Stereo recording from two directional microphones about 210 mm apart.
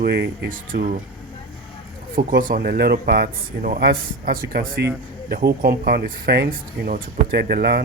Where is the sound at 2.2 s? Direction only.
40° right (ahead or behind).